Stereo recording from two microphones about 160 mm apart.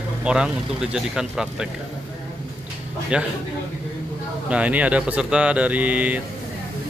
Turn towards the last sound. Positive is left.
turn(degrees=-10)  # may be behind; listen again after turning